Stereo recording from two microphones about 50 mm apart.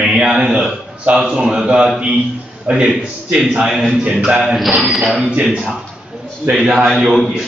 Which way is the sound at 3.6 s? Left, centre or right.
Centre.